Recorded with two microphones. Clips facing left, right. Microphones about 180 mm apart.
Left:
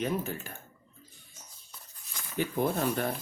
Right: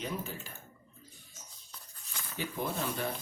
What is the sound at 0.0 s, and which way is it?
Speech, 60° left (ahead or behind).